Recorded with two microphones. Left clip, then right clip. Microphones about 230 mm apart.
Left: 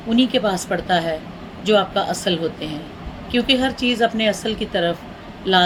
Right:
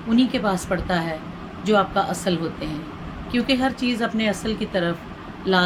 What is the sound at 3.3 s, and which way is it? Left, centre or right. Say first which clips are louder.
Speech: left 4 dB; centre.